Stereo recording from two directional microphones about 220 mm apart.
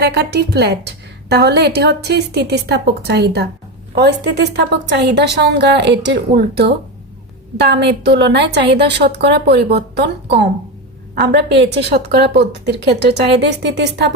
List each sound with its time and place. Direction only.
0.0 s a woman's voice: 50° right (ahead or behind)
11.1 s a woman's voice: 45° right (ahead or behind)